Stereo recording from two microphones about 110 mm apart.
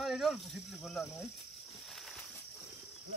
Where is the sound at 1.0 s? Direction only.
25° left (ahead or behind).